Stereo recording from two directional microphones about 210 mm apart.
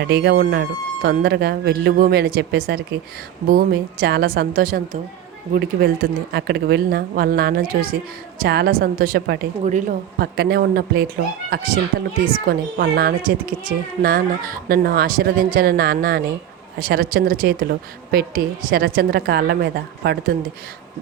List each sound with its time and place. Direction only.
0.0 s speech: 50° right (ahead or behind)
9.6 s speech: 35° right (ahead or behind)